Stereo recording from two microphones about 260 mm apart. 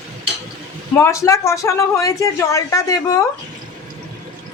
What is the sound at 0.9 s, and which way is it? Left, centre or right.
Speech, centre.